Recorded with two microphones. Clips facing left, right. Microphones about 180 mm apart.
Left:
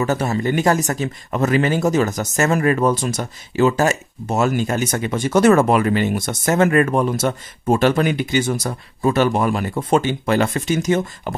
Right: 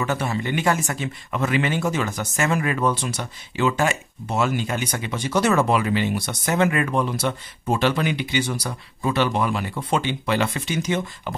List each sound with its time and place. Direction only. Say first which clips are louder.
0.0 s speech: left 5 dB; 40° left (ahead or behind)